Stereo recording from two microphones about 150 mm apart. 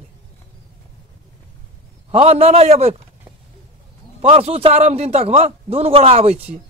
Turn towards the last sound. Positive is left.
turn(degrees=-45)  # may be behind; listen again after turning